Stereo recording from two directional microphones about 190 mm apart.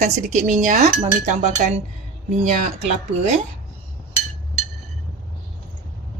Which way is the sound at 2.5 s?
35° right (ahead or behind).